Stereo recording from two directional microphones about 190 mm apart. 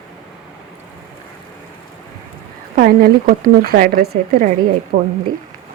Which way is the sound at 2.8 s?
50° right (ahead or behind).